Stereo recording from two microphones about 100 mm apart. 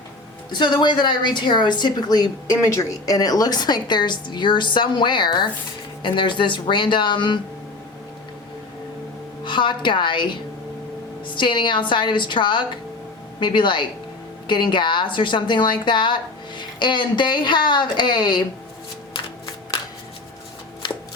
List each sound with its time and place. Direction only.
0.5 s a woman's voice: 50° left (ahead or behind)
9.4 s a woman's voice: 50° left (ahead or behind)
11.3 s a woman's voice: 55° left (ahead or behind)